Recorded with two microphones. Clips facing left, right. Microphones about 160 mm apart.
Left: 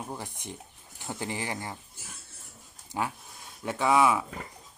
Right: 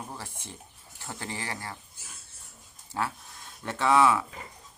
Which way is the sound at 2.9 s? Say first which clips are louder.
Even; 15° left (ahead or behind).